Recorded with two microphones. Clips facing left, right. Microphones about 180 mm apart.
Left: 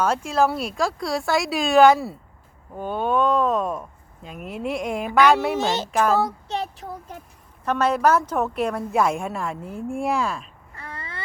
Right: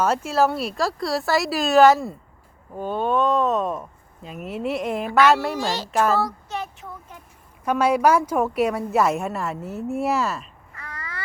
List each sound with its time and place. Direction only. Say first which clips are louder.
0.0 s a woman's voice: right 1 dB; 5° right (ahead or behind)
5.5 s speech: left 2 dB; 20° left (ahead or behind)
5.9 s a woman's voice: right 1 dB; centre (ahead or behind)
6.5 s a sound: left 3 dB; 35° left (ahead or behind)
7.6 s a woman's voice: right 1 dB; 10° right (ahead or behind)
10.8 s a sound: left 1 dB; 30° left (ahead or behind)